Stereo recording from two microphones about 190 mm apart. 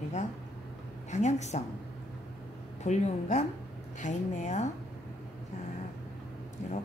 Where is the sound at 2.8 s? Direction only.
35° left (ahead or behind).